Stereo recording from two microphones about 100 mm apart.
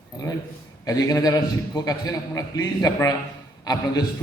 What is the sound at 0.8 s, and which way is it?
A man's voice, 40° left (ahead or behind).